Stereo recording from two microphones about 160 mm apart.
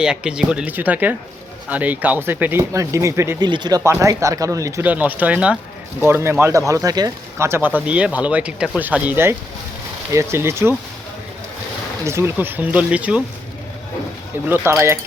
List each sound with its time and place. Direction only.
0.0 s speech: 5° right (ahead or behind)
12.0 s speech: 15° right (ahead or behind)
14.4 s speech: 15° right (ahead or behind)